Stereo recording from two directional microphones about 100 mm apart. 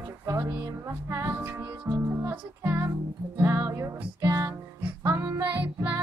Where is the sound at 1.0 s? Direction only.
25° right (ahead or behind).